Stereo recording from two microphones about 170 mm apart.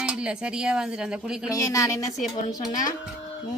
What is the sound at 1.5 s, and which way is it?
Speech, 20° left (ahead or behind).